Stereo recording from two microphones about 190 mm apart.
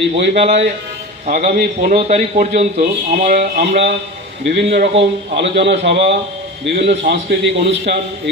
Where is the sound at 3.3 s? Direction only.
65° right (ahead or behind).